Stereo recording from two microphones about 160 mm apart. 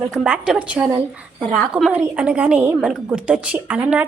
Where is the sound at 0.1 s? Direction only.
5° right (ahead or behind).